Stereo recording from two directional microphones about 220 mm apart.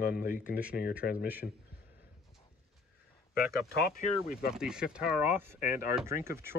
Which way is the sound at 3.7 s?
45° left (ahead or behind).